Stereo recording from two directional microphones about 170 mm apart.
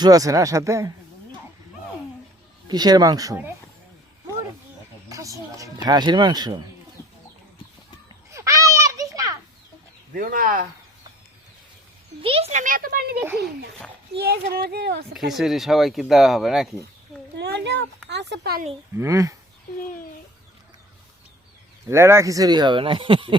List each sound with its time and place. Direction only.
0.0 s speech: 20° right (ahead or behind)
2.6 s speech: 25° right (ahead or behind)
5.0 s speech: 20° right (ahead or behind)
8.3 s a sound: 20° right (ahead or behind)
10.2 s speech: 55° right (ahead or behind)
12.2 s speech: 35° right (ahead or behind); by 13.1 s 60° right (ahead or behind)
13.1 s a child's voice: 10° right (ahead or behind)
14.2 s speech: 65° right (ahead or behind)
15.1 s speech: centre (ahead or behind)
17.3 s a child's voice: 85° right
18.9 s speech: 20° right (ahead or behind)
21.8 s speech: 15° right (ahead or behind)